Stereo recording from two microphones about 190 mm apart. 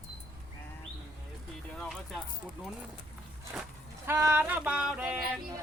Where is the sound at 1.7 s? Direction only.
5° left (ahead or behind).